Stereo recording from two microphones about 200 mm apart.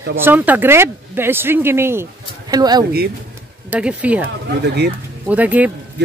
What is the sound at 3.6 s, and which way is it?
Speech, 5° right (ahead or behind).